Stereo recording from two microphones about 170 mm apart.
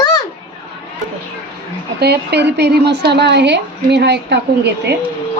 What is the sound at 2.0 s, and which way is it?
A woman's voice, 75° right (ahead or behind).